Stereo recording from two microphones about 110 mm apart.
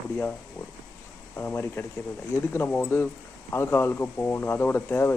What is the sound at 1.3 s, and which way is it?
Speech, 20° left (ahead or behind).